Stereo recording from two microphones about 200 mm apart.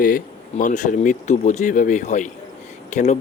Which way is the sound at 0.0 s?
40° left (ahead or behind).